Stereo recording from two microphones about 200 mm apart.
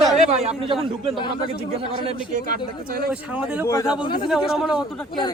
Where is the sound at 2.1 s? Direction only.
40° right (ahead or behind).